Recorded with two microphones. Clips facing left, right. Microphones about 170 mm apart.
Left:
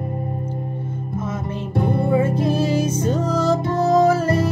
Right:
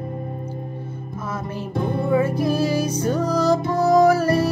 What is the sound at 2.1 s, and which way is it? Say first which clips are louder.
Music: right 1 dB; 25° left (ahead or behind).